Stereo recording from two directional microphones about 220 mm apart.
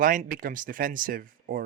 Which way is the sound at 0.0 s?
35° right (ahead or behind).